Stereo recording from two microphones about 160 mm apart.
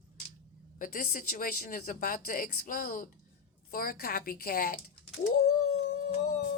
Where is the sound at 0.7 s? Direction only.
60° left (ahead or behind).